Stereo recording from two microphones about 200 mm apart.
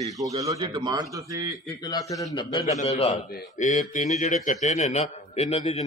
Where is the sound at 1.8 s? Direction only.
20° left (ahead or behind).